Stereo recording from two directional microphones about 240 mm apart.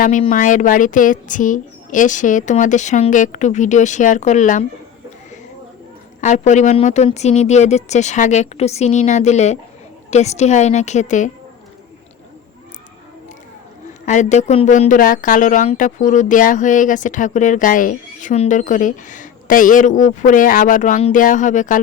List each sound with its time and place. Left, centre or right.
0.0 s a woman's voice: left
6.2 s speech: left
14.0 s a woman's voice: left